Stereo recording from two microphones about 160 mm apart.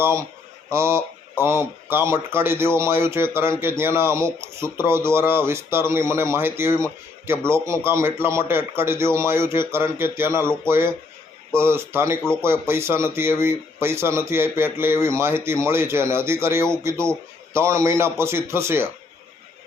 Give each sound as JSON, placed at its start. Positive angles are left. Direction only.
{"t": 0.0, "sound": "speech", "side_deg": -15}